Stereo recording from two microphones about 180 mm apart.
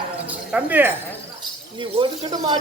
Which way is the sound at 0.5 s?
10° right (ahead or behind).